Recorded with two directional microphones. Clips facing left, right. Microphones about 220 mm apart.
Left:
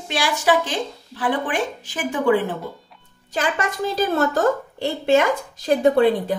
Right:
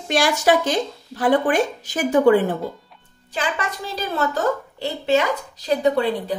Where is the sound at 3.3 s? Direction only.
45° left (ahead or behind).